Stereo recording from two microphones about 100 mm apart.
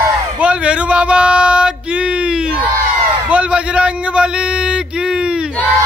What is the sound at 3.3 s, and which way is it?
A man's voice, 10° right (ahead or behind).